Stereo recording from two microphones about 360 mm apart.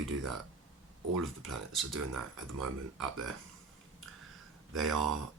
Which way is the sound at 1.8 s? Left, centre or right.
Right.